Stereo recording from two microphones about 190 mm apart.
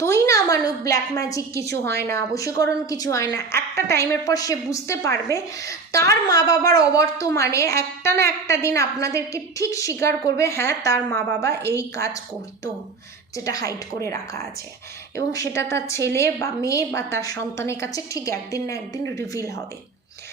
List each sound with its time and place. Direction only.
0.0 s a woman's voice: 15° left (ahead or behind)
13.3 s a woman's voice: 20° left (ahead or behind)